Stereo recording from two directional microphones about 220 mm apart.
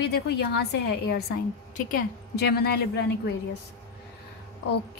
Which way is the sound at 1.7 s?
45° left (ahead or behind).